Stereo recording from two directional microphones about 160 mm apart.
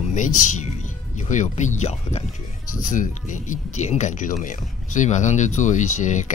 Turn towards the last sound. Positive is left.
turn(degrees=50)  # may be behind; listen again after turning